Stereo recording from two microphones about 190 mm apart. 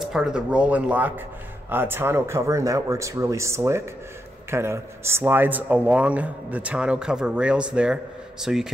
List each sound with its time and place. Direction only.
0.0 s speech: 5° right (ahead or behind)